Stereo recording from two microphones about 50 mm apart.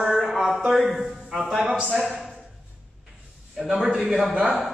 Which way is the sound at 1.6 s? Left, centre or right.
Centre.